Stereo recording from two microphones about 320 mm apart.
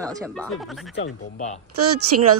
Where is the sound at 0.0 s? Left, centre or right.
Centre.